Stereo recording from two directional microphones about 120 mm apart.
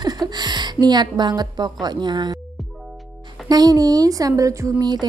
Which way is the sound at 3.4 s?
35° right (ahead or behind).